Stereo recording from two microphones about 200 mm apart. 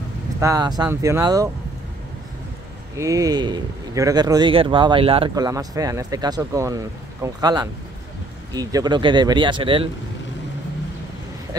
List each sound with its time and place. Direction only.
0.4 s speech: 20° right (ahead or behind)
3.0 s speech: 15° right (ahead or behind)